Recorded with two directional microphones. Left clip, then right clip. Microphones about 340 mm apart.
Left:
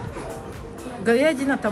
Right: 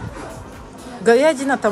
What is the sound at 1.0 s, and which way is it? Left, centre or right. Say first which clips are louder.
Speech: right 6 dB; centre.